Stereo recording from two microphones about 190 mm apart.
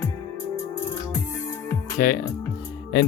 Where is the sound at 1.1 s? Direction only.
15° left (ahead or behind).